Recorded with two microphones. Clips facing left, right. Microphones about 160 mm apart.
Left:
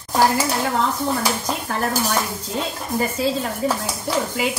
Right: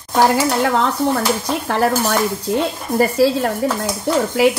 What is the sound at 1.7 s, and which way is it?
A woman's voice, 75° right (ahead or behind).